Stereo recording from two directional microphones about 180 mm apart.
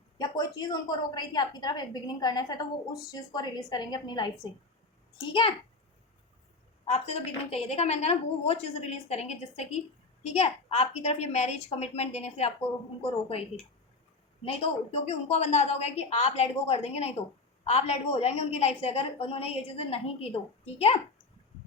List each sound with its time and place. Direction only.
0.2 s a woman's voice: 25° left (ahead or behind)
6.9 s a woman's voice: 35° left (ahead or behind)
14.4 s a woman's voice: 35° left (ahead or behind)